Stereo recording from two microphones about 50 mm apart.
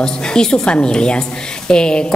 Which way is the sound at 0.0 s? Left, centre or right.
Centre.